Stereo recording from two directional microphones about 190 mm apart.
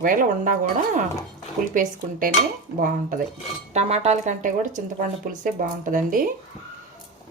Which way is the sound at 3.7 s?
35° right (ahead or behind).